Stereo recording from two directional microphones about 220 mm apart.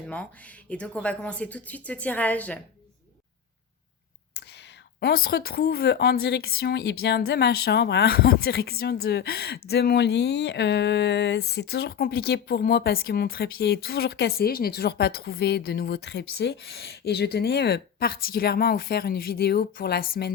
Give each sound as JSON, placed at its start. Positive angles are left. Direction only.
{"t": 0.1, "sound": "speech", "side_deg": 5}
{"t": 4.4, "sound": "speech", "side_deg": 50}